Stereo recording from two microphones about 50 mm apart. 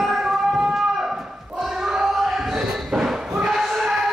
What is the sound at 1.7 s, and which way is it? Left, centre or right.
Basketball bounce, centre.